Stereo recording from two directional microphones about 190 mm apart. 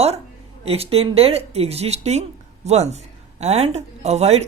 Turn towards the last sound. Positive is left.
turn(degrees=-35)  # may be behind; listen again after turning